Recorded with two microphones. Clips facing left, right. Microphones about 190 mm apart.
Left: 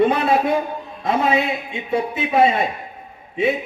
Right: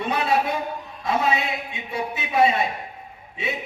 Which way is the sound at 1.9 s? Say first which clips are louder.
Left 7 dB; 50° left (ahead or behind).